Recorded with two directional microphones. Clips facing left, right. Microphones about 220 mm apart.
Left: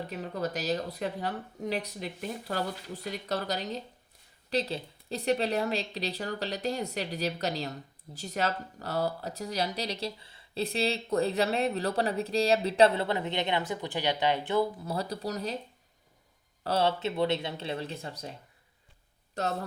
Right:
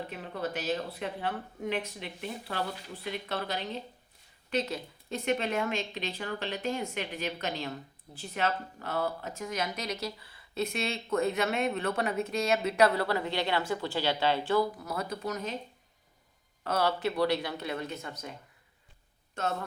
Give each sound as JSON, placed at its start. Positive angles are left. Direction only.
{"t": 0.1, "sound": "a woman's voice", "side_deg": 40}
{"t": 16.6, "sound": "speech", "side_deg": 25}